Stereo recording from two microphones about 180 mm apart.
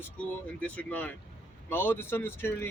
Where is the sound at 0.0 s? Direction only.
10° left (ahead or behind).